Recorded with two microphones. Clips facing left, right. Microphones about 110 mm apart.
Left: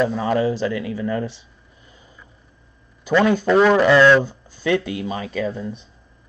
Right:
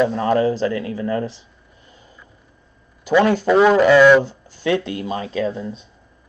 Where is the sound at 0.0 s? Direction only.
5° left (ahead or behind).